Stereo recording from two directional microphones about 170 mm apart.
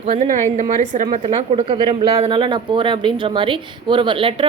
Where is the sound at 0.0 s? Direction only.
45° right (ahead or behind).